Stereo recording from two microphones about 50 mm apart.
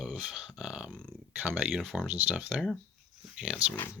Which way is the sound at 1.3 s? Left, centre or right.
Right.